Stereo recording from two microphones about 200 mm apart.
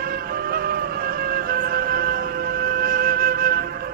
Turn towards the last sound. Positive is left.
turn(degrees=-45)  # may be behind; listen again after turning